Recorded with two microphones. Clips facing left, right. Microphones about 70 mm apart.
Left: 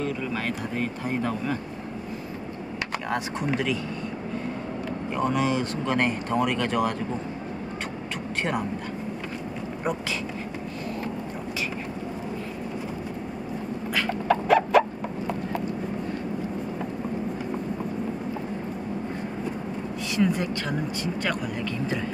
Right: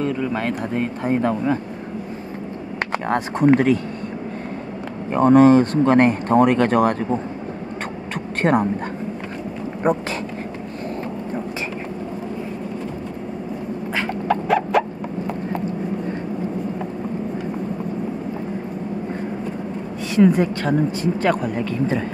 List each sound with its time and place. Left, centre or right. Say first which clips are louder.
0.0 s speech: right 6 dB; right
2.9 s speech: right 7 dB; right
5.1 s speech: right 13 dB; right
8.4 s speech: right 10 dB; right
9.8 s a man's voice: right 9 dB; right
14.2 s clip-clop: right 1 dB; centre
20.2 s a sound: right 9 dB; right
21.2 s a man's voice: right 9 dB; right